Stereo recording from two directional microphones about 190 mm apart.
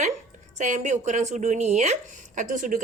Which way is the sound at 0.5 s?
40° right (ahead or behind).